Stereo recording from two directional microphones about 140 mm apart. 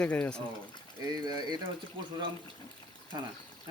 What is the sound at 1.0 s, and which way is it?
Speech, 25° right (ahead or behind).